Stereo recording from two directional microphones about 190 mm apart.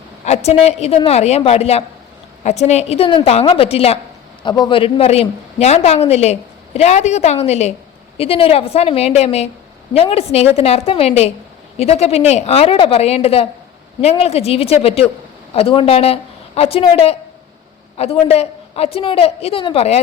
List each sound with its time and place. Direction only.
0.3 s a woman's voice: 35° left (ahead or behind)